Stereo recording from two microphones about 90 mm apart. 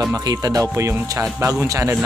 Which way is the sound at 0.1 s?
45° right (ahead or behind).